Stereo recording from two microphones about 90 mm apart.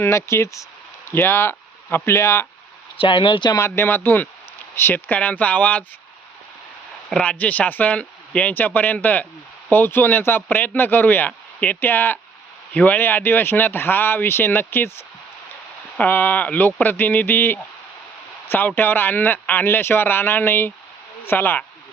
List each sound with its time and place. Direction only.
0.0 s speech: 30° left (ahead or behind)
3.0 s speech: 65° left (ahead or behind)
3.8 s speech: 20° left (ahead or behind)
7.1 s speech: 10° left (ahead or behind)